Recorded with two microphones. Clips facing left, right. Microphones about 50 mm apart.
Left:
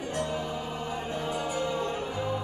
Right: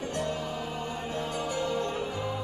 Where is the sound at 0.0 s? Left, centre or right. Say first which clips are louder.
Left 1 dB; centre.